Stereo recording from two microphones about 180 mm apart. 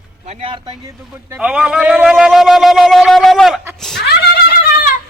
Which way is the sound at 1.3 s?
5° right (ahead or behind).